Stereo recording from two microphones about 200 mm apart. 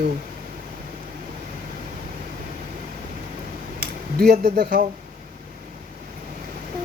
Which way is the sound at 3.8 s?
50° right (ahead or behind).